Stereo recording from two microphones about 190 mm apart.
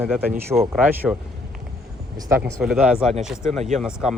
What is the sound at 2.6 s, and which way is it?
Speech, 5° right (ahead or behind).